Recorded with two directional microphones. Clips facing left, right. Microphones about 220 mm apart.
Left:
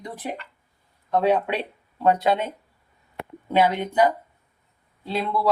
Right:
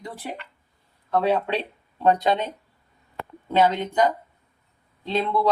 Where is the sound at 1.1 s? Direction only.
15° left (ahead or behind).